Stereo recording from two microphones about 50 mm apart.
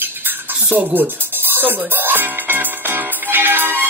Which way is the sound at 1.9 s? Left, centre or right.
Right.